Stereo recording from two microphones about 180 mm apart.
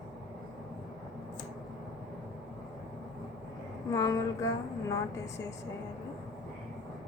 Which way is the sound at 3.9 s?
20° left (ahead or behind).